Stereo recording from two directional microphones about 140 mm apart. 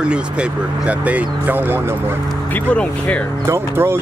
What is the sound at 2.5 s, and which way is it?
Speech, 10° left (ahead or behind).